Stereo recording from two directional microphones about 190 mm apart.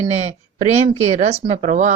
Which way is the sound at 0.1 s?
35° right (ahead or behind).